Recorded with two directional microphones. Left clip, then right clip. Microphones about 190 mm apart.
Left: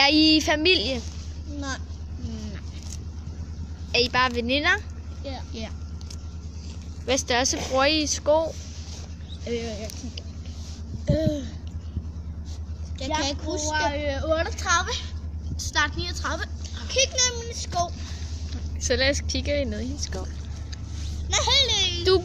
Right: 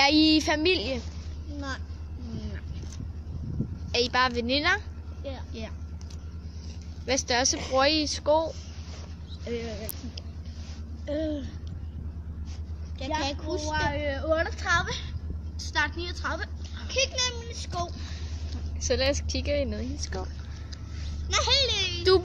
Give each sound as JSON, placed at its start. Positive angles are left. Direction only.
{"t": 0.0, "sound": "a woman's voice", "side_deg": -5}
{"t": 3.9, "sound": "a woman's voice", "side_deg": -10}
{"t": 7.1, "sound": "a woman's voice", "side_deg": -5}
{"t": 7.5, "sound": "a woman's voice", "side_deg": 20}
{"t": 7.8, "sound": "a woman's voice", "side_deg": -5}
{"t": 11.1, "sound": "a woman's voice", "side_deg": -5}
{"t": 13.2, "sound": "a woman's voice", "side_deg": -10}
{"t": 13.8, "sound": "a woman's voice", "side_deg": 20}
{"t": 15.5, "sound": "a woman's voice", "side_deg": 0}
{"t": 16.8, "sound": "a woman's voice", "side_deg": -10}
{"t": 21.3, "sound": "a child's voice", "side_deg": -20}